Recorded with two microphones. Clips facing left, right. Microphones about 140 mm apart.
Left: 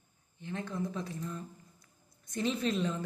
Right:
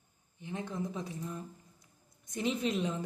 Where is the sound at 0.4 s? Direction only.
15° right (ahead or behind).